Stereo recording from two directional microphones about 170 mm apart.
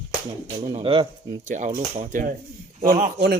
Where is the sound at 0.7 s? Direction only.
30° right (ahead or behind).